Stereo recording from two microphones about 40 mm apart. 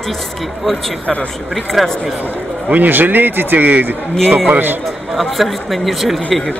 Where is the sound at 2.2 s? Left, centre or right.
Right.